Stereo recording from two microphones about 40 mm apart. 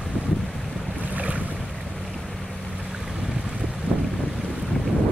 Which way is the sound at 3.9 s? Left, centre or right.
Centre.